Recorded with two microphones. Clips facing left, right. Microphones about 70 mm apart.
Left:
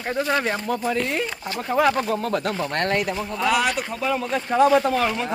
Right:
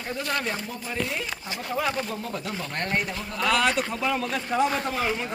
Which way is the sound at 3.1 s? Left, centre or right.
Centre.